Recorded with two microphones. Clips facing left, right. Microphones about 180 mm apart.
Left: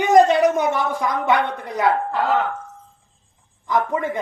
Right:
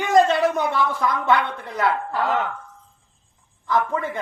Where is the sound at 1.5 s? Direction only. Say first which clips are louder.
Left 2 dB; 15° left (ahead or behind).